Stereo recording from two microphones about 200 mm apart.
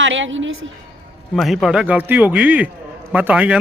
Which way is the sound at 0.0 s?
70° right (ahead or behind).